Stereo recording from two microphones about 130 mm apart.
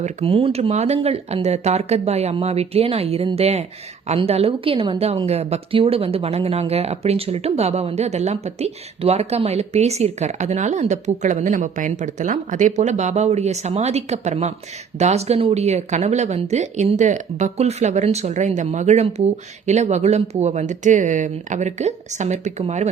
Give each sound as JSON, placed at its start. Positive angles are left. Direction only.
{"t": 0.0, "sound": "a woman's voice", "side_deg": -50}